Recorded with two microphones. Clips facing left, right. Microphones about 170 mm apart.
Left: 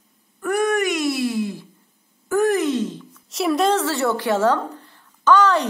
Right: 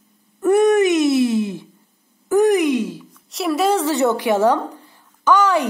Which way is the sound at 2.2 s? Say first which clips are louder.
Right 4 dB; 20° right (ahead or behind).